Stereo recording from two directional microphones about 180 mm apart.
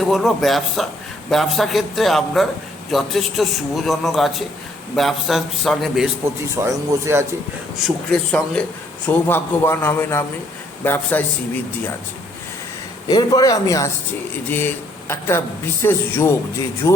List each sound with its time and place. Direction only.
0.0 s a man's voice: centre (ahead or behind)
6.2 s a man's voice: 15° right (ahead or behind)
7.8 s a man's voice: centre (ahead or behind)
13.1 s a man's voice: 20° left (ahead or behind)